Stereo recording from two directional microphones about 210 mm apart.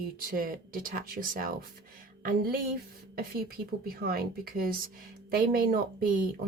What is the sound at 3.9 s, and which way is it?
Speech, 45° right (ahead or behind).